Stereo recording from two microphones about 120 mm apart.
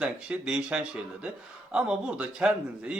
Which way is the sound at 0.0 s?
10° right (ahead or behind).